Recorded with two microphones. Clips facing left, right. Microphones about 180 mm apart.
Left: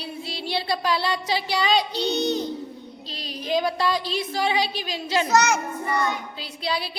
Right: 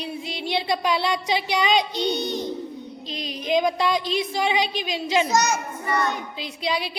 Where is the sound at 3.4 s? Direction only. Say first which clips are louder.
Right 2 dB; 15° right (ahead or behind).